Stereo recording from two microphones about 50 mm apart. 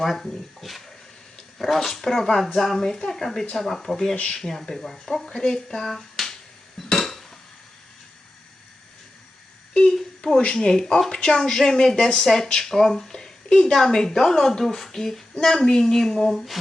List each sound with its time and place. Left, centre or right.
0.0 s speech: centre
4.1 s speech: left
4.4 s speech: centre
6.9 s dishes: centre
9.7 s a sound: centre
10.3 s speech: centre